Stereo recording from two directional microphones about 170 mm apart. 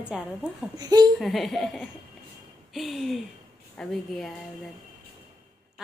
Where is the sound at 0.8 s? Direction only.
25° right (ahead or behind).